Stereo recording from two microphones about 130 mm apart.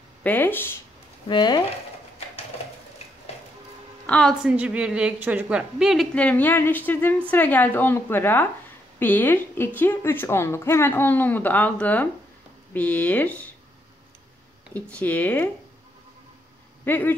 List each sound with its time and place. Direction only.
0.2 s a woman's voice: 15° left (ahead or behind)
1.3 s speech: 35° left (ahead or behind)
4.0 s a woman's voice: 5° left (ahead or behind)
4.4 s a woman's voice: 10° right (ahead or behind)
6.1 s a woman's voice: 10° left (ahead or behind)
14.7 s a woman's voice: 10° left (ahead or behind)
16.8 s speech: 15° left (ahead or behind)